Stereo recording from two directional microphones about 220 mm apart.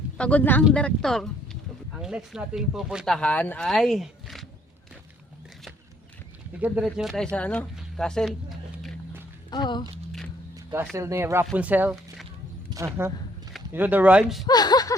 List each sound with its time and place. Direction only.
0.2 s speech: 5° left (ahead or behind)
6.8 s a sound: centre (ahead or behind)
9.5 s speech: 20° left (ahead or behind)
10.9 s speech: 10° right (ahead or behind)
14.4 s speech: 20° left (ahead or behind)